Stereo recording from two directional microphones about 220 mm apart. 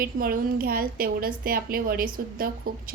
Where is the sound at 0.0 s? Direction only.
40° right (ahead or behind).